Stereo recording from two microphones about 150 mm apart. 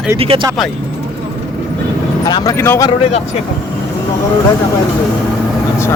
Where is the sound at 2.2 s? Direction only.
25° left (ahead or behind).